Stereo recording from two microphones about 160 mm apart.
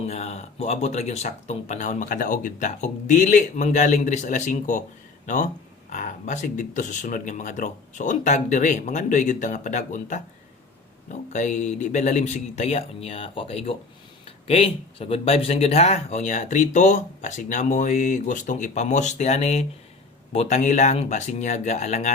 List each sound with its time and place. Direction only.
0.1 s speech: 45° left (ahead or behind)